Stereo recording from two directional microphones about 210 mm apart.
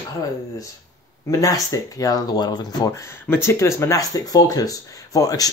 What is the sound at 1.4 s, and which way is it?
Speech, 15° left (ahead or behind).